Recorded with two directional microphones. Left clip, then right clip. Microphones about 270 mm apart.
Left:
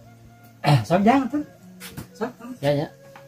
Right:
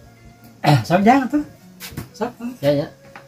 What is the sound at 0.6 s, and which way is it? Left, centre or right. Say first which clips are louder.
Speech: right 4 dB; centre.